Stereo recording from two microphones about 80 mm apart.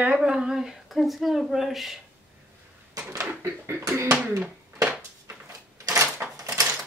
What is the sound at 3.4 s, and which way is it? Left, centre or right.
Speech, right.